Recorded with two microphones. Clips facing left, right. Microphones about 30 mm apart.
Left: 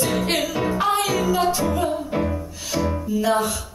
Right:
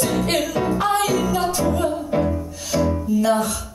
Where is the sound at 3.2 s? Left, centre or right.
Left.